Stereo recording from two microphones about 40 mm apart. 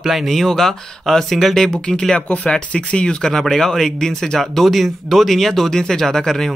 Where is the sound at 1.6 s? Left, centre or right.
Centre.